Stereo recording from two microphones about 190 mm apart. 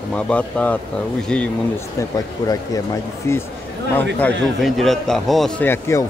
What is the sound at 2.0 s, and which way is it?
Speech, 15° left (ahead or behind).